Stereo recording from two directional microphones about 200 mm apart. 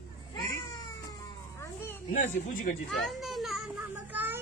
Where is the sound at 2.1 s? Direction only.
40° left (ahead or behind).